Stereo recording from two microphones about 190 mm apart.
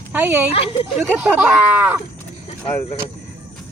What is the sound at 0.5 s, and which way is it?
Speech, 30° left (ahead or behind).